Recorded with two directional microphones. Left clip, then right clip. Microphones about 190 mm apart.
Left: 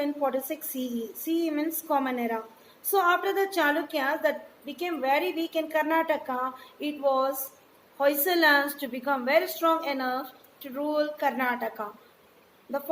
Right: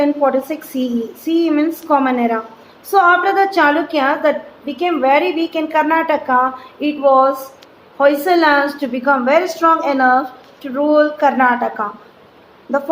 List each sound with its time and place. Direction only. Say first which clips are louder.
0.0 s a woman's voice: right 13 dB; 50° left (ahead or behind)